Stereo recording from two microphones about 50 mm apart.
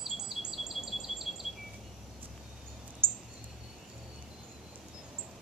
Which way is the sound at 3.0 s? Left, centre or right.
Centre.